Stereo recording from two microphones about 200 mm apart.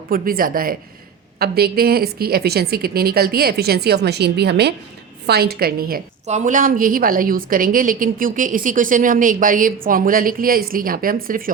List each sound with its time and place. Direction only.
0.1 s a woman's voice: 45° right (ahead or behind)
6.2 s a woman's voice: 40° right (ahead or behind)